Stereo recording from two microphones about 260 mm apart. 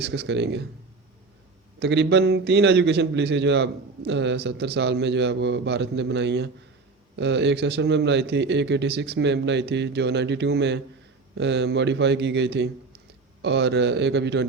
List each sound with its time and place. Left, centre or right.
0.0 s a man's voice: right
1.8 s a man's voice: right